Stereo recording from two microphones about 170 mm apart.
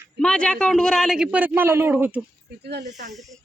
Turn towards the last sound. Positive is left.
turn(degrees=-45)  # may be behind; listen again after turning